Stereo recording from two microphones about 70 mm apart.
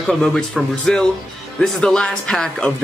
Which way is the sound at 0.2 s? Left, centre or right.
Centre.